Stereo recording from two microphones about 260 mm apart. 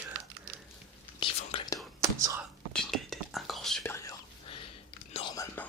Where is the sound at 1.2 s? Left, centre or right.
Centre.